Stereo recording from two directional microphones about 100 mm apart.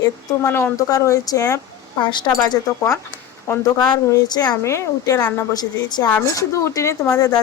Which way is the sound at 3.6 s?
40° left (ahead or behind).